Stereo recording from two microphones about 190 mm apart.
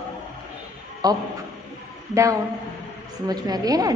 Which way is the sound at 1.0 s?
20° right (ahead or behind).